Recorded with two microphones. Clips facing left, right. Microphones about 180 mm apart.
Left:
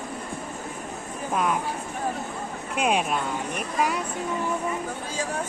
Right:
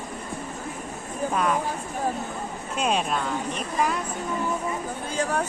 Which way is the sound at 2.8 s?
10° left (ahead or behind).